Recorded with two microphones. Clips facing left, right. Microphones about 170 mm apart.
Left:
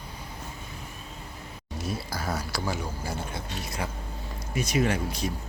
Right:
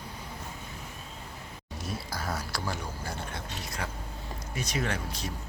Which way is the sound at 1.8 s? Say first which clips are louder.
Left 3 dB; centre (ahead or behind).